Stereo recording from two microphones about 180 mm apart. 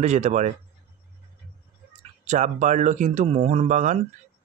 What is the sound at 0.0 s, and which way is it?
Speech, 40° right (ahead or behind).